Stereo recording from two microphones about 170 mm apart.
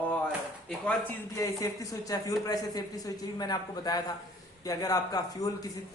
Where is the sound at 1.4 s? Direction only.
20° left (ahead or behind).